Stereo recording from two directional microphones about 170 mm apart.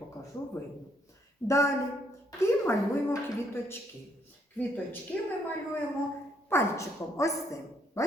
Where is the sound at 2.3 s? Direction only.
15° left (ahead or behind).